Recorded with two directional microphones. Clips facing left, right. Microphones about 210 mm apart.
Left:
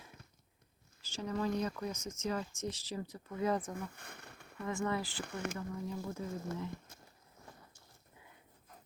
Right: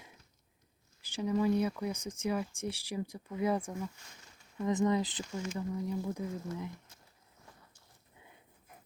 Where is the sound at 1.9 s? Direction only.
30° right (ahead or behind).